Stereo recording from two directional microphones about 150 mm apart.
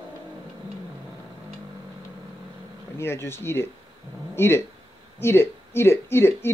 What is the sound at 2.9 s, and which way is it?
Speech, 15° left (ahead or behind).